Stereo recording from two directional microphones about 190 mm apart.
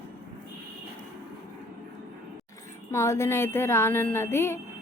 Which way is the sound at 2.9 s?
15° left (ahead or behind).